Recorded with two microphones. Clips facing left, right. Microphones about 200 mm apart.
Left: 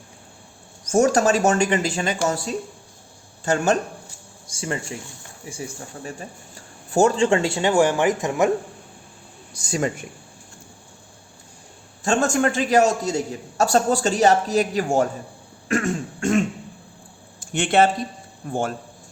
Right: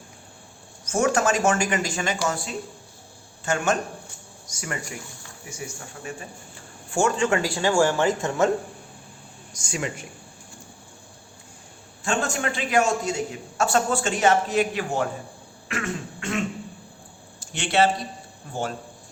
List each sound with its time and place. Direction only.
0.9 s a man's voice: 40° left (ahead or behind); by 8.4 s 15° left (ahead or behind)
9.6 s a man's voice: 35° left (ahead or behind)
12.0 s a man's voice: 45° left (ahead or behind)
15.7 s throat clearing: 45° left (ahead or behind)
17.4 s speech: 55° left (ahead or behind)